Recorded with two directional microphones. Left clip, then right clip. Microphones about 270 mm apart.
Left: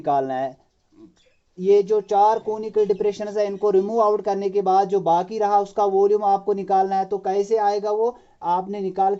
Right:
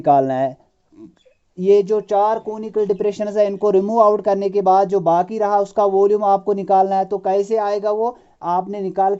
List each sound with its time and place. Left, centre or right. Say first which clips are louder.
0.0 s speech: right 7 dB; right
1.5 s speech: right 3 dB; right